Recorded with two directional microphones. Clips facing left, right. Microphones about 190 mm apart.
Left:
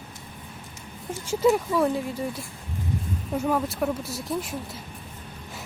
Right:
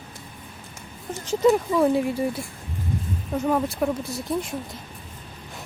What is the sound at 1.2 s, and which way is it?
Speech, centre (ahead or behind).